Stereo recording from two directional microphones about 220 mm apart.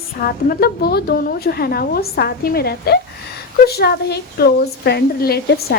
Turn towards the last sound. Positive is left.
turn(degrees=45)  # may be behind; listen again after turning